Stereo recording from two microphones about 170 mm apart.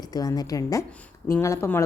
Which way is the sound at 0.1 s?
20° left (ahead or behind).